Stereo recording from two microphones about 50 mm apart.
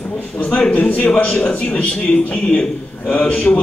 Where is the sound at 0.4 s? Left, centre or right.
Left.